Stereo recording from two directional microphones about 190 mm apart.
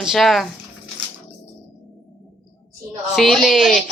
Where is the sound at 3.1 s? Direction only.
Centre (ahead or behind).